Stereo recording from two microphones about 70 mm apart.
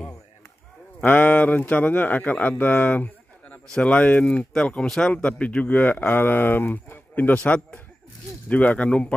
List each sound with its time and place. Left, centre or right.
1.0 s speech: left